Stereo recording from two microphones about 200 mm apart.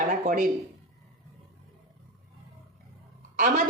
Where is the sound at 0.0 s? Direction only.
40° right (ahead or behind).